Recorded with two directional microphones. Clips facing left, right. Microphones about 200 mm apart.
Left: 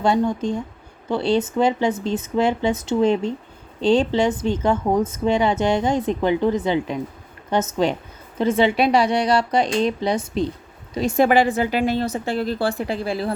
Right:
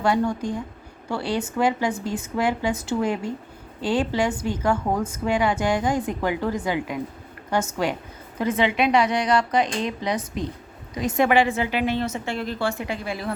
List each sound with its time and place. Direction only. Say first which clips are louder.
0.0 s a woman's voice: left 3 dB; 20° left (ahead or behind)
8.4 s a woman's voice: left 4 dB; 30° left (ahead or behind)